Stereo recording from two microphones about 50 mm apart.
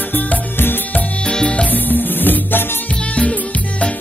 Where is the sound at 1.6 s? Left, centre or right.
Left.